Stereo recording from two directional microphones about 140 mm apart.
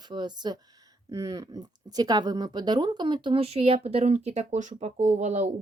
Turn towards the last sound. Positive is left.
turn(degrees=-55)  # may be behind; listen again after turning